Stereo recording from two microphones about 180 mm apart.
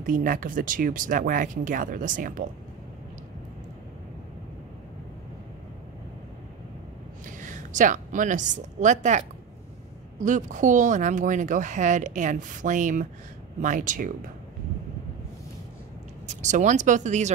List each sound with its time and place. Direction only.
0.0 s speech: 45° right (ahead or behind)
7.2 s a woman's voice: 45° right (ahead or behind)
10.2 s speech: 45° right (ahead or behind)
16.3 s speech: 40° right (ahead or behind)